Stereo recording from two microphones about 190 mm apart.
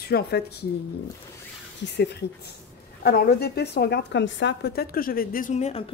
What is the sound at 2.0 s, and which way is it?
A woman's voice, 60° left (ahead or behind).